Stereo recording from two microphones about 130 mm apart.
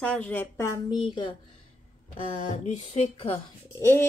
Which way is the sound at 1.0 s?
40° left (ahead or behind).